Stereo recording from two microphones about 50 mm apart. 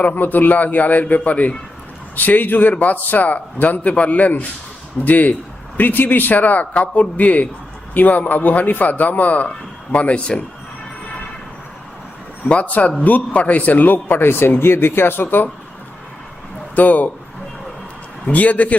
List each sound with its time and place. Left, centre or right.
0.0 s a man's voice: left
12.5 s a man's voice: left
16.7 s a man's voice: left
18.3 s a man's voice: left